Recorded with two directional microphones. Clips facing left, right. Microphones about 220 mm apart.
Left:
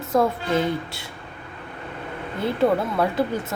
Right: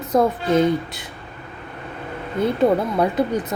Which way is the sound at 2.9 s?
20° right (ahead or behind).